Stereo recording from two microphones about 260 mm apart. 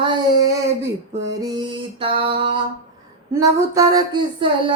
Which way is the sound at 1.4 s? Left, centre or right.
Centre.